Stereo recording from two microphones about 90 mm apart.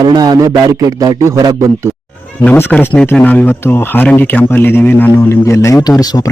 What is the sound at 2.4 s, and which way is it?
Speech, 20° left (ahead or behind).